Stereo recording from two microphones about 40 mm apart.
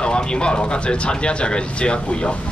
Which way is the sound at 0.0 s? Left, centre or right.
Left.